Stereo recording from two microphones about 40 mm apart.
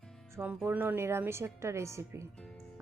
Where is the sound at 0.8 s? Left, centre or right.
Right.